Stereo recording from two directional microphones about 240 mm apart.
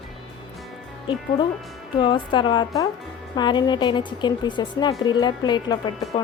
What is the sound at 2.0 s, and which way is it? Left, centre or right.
A woman's voice, centre.